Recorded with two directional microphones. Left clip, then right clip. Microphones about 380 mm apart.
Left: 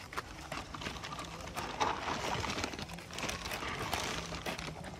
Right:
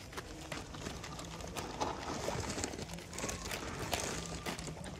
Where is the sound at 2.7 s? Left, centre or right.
Centre.